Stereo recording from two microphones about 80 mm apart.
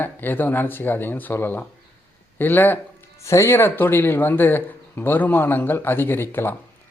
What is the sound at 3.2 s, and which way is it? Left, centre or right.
Speech, left.